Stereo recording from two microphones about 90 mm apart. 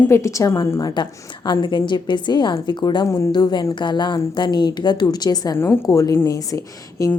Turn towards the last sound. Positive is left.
turn(degrees=35)  # may be behind; listen again after turning